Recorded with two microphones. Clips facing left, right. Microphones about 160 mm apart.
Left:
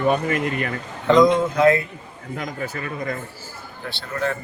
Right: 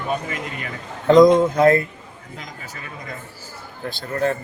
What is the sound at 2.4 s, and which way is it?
Speech, 60° left (ahead or behind).